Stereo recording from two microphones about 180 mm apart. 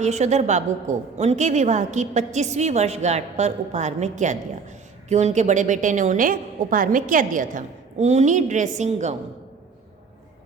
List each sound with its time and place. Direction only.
0.0 s a woman's voice: 40° right (ahead or behind)